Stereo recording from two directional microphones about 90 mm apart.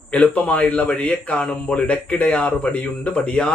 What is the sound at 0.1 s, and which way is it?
A man's voice, 15° left (ahead or behind).